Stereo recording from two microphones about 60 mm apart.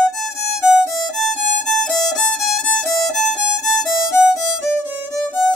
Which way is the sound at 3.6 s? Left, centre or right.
Centre.